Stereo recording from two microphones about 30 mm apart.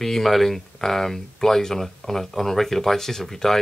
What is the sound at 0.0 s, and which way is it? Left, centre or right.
Speech, centre.